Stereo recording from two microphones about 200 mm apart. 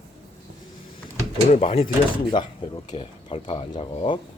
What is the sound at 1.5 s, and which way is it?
Speech, 30° left (ahead or behind).